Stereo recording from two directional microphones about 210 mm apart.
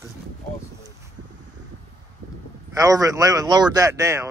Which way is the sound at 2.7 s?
15° right (ahead or behind).